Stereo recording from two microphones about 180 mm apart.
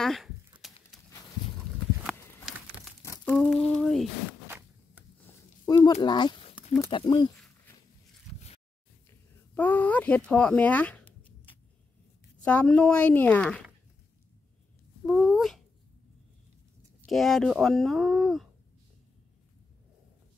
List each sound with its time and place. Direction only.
0.0 s speech: centre (ahead or behind)
0.6 s a sound: centre (ahead or behind)
2.0 s crumpling: centre (ahead or behind)
4.3 s zipper: 10° right (ahead or behind)
5.7 s speech: 20° left (ahead or behind)
8.3 s zipper: centre (ahead or behind)
9.6 s speech: 10° left (ahead or behind)
12.4 s a woman's voice: 5° left (ahead or behind)
15.0 s speech: centre (ahead or behind)
17.0 s speech: centre (ahead or behind)